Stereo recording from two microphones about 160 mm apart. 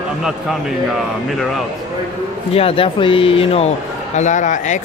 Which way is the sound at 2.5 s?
35° left (ahead or behind).